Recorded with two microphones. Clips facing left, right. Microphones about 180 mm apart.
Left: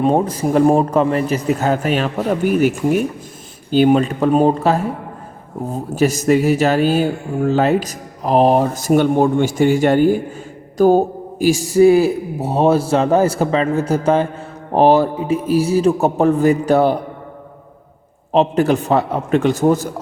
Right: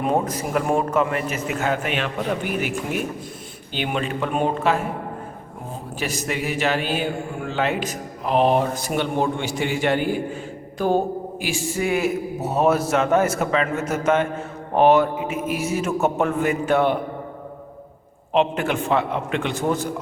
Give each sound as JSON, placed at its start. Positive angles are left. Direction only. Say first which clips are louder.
{"t": 0.0, "sound": "speech", "louder": "left 6 dB", "side_deg": 30}
{"t": 5.9, "sound": "speech", "louder": "left 13 dB", "side_deg": 45}
{"t": 18.3, "sound": "speech", "louder": "left 6 dB", "side_deg": 40}